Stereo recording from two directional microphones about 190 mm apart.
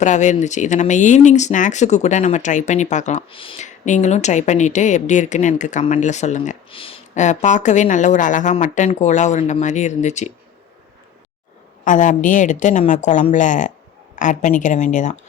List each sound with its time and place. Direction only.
0.0 s speech: 40° left (ahead or behind)
6.7 s speech: 30° left (ahead or behind)
11.9 s speech: 40° left (ahead or behind)